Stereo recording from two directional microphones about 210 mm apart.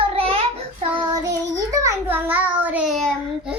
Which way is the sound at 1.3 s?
15° right (ahead or behind).